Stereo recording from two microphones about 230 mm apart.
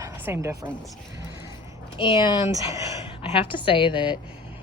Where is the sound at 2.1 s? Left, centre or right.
Centre.